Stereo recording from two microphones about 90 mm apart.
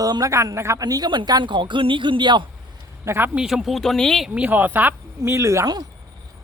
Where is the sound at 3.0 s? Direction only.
30° right (ahead or behind).